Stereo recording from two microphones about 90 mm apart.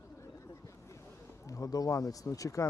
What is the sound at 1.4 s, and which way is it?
Speech, 40° left (ahead or behind).